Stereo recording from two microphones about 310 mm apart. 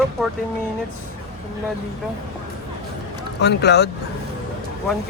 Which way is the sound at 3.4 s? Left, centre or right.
Left.